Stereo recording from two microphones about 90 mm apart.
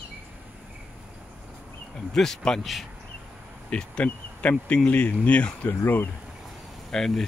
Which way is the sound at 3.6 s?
15° left (ahead or behind).